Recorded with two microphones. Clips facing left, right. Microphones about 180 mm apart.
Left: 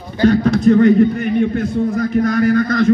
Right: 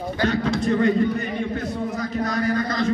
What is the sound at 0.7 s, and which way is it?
Speech, 65° left (ahead or behind).